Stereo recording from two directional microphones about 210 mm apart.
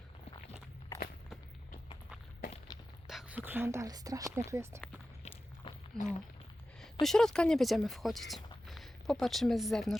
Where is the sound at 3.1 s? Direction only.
5° right (ahead or behind).